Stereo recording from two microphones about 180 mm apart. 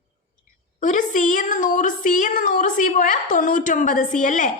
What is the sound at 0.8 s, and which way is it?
Speech, 45° left (ahead or behind).